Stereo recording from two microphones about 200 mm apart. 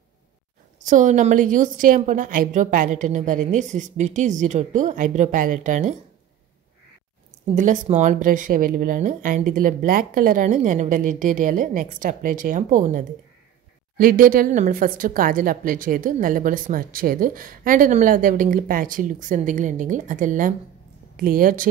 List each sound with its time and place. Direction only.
0.8 s speech: 40° right (ahead or behind)
7.5 s a woman's voice: 40° right (ahead or behind)